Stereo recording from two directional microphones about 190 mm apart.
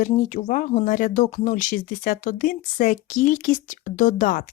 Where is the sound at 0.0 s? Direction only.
40° left (ahead or behind).